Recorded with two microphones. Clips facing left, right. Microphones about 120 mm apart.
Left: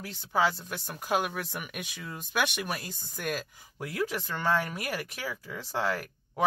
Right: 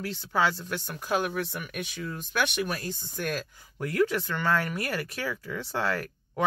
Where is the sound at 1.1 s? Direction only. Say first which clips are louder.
Right 1 dB; 10° left (ahead or behind).